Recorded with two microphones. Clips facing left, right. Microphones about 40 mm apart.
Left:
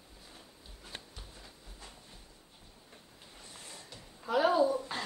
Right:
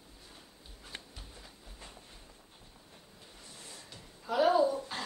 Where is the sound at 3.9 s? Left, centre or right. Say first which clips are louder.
Left 4 dB; centre.